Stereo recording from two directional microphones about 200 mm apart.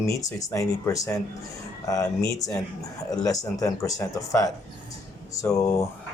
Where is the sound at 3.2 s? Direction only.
15° left (ahead or behind).